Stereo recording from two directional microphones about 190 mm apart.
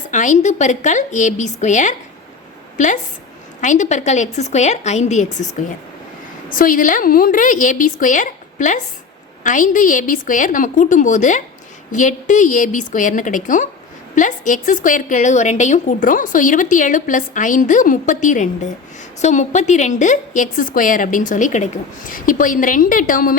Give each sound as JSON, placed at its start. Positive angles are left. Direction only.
{"t": 0.1, "sound": "a woman's voice", "side_deg": 40}